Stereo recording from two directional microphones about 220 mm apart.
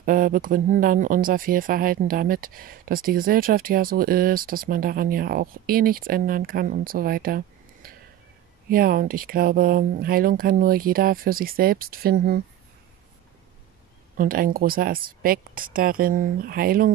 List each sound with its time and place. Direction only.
0.0 s speech: 40° right (ahead or behind)
14.1 s speech: 40° right (ahead or behind)